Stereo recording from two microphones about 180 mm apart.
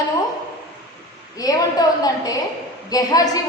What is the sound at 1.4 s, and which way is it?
A woman's voice, 20° left (ahead or behind).